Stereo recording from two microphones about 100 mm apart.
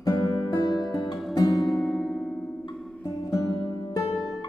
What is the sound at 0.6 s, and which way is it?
Music, 45° left (ahead or behind).